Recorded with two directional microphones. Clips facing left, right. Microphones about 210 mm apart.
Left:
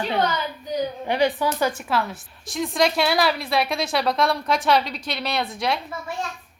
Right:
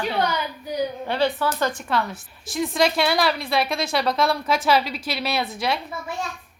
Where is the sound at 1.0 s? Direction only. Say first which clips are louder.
Left 3 dB; 15° left (ahead or behind).